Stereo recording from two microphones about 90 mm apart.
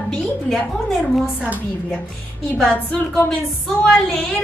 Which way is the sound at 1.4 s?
15° right (ahead or behind).